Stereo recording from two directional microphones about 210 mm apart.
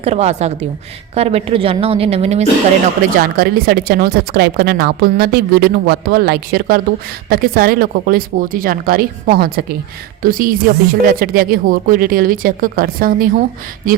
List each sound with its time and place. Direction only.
0.0 s a woman's voice: 30° right (ahead or behind)
3.2 s speech: 45° right (ahead or behind)